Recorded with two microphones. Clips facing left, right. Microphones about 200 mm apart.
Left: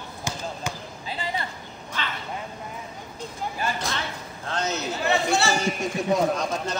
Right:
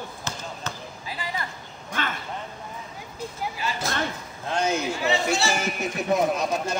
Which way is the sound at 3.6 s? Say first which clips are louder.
Left 3 dB; 50° left (ahead or behind).